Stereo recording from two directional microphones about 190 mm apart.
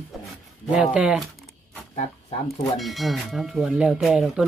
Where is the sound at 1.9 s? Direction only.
35° left (ahead or behind).